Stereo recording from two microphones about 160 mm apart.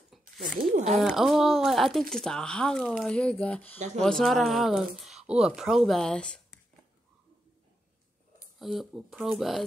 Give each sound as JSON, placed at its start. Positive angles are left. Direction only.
{"t": 0.2, "sound": "speech", "side_deg": -55}
{"t": 0.9, "sound": "speech", "side_deg": 0}
{"t": 8.5, "sound": "speech", "side_deg": 0}